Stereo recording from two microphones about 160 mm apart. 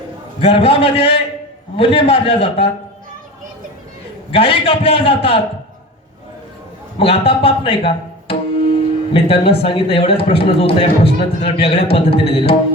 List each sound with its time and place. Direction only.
0.3 s a man's voice: 35° left (ahead or behind)
4.3 s a man's voice: 35° left (ahead or behind)
7.0 s a man's voice: 35° left (ahead or behind)